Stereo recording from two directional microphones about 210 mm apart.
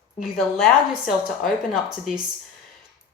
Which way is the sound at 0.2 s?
Centre (ahead or behind).